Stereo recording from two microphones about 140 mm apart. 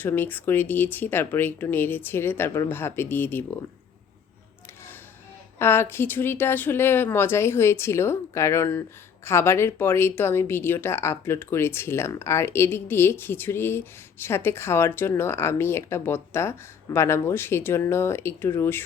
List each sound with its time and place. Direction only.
0.0 s speech: 15° left (ahead or behind)
5.5 s speech: 15° left (ahead or behind)